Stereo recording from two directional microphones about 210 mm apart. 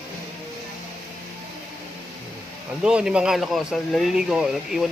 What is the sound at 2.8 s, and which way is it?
Speech, 5° right (ahead or behind).